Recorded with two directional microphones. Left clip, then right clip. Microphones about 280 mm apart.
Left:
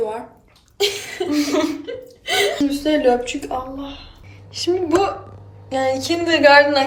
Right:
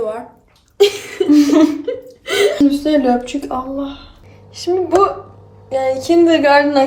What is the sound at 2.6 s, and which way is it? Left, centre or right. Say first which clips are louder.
Speech: right 3 dB; right.